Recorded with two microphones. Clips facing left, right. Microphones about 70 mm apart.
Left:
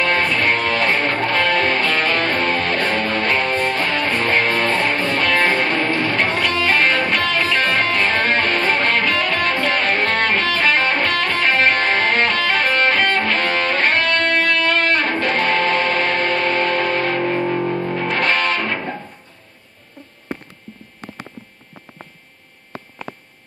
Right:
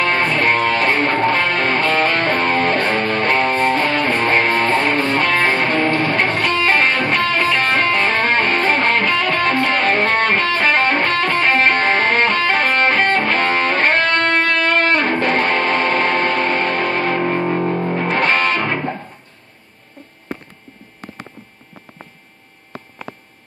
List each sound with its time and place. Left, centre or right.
0.4 s music: right